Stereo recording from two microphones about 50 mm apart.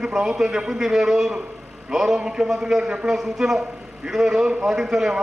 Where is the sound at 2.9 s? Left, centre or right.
Right.